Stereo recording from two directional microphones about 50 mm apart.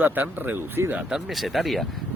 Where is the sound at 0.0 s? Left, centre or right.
Right.